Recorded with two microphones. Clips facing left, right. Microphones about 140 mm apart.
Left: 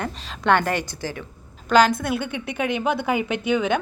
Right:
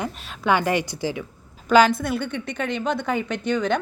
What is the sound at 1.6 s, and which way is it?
A woman's voice, 5° right (ahead or behind).